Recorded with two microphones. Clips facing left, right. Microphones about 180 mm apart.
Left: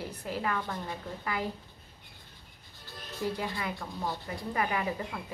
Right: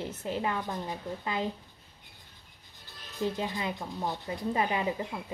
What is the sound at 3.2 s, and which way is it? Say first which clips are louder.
Speech: right 2 dB; 20° right (ahead or behind).